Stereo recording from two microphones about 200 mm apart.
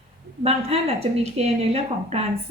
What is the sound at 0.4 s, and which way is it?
Speech, 30° right (ahead or behind).